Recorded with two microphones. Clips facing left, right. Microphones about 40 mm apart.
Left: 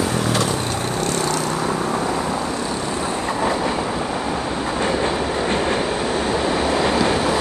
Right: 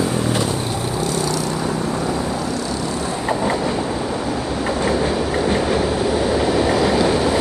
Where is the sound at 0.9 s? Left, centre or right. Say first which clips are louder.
Even; left.